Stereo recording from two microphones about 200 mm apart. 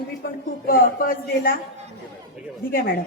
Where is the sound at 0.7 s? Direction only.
45° left (ahead or behind).